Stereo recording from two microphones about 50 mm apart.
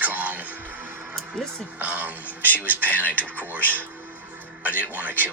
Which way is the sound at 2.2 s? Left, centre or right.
Left.